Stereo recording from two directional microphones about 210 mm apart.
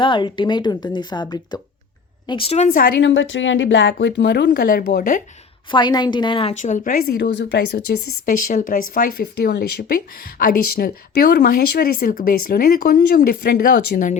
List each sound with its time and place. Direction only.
0.0 s speech: 20° left (ahead or behind)
2.6 s speech: 45° left (ahead or behind)
5.7 s a woman's voice: 20° left (ahead or behind); by 14.2 s 40° left (ahead or behind)